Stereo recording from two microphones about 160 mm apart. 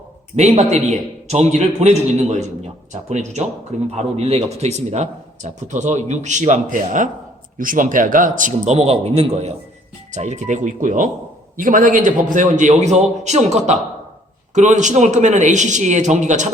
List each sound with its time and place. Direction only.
0.3 s speech: 45° right (ahead or behind)